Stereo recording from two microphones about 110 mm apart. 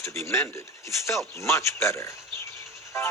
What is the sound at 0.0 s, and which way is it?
Speech, 25° left (ahead or behind).